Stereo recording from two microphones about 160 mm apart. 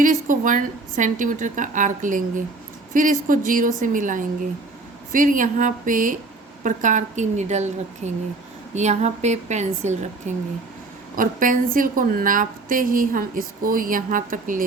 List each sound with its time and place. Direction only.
0.0 s a woman's voice: 55° right (ahead or behind)
11.2 s a woman's voice: 60° right (ahead or behind)